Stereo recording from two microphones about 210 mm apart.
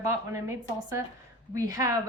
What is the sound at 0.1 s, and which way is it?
Speech, 15° right (ahead or behind).